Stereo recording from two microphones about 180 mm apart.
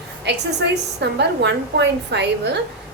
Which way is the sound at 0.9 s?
70° right (ahead or behind).